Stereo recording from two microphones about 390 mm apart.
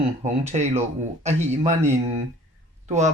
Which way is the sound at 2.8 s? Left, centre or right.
Centre.